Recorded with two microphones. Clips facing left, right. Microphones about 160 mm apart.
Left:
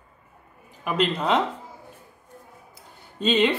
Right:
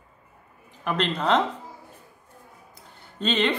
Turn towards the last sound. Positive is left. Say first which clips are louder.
# left 3 dB
turn(degrees=10)  # may be behind; listen again after turning